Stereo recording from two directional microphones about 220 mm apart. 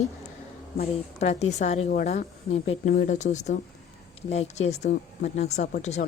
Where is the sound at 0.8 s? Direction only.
30° left (ahead or behind).